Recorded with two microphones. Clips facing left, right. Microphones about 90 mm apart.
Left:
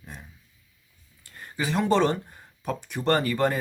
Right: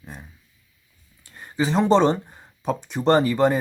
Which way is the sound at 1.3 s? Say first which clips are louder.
Right 5 dB; 25° right (ahead or behind).